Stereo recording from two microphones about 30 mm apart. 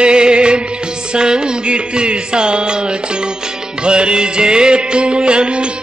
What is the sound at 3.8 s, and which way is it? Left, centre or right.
Music, right.